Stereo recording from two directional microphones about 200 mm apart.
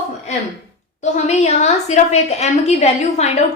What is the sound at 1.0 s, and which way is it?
A woman's voice, 35° left (ahead or behind).